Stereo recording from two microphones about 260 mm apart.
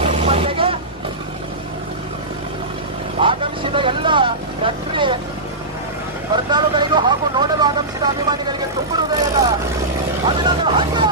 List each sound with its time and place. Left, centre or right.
0.0 s vehicle: right
3.2 s vehicle: centre
6.3 s speech: centre
10.2 s speech: centre